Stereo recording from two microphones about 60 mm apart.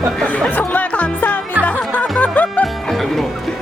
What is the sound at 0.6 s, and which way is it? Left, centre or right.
Music, left.